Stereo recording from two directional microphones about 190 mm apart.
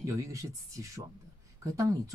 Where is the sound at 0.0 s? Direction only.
15° right (ahead or behind).